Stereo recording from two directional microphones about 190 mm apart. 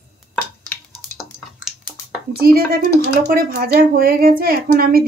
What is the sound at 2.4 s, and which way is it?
Speech, 50° right (ahead or behind).